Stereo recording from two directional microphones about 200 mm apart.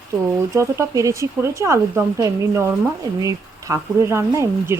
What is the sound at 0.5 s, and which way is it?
Speech, 15° right (ahead or behind).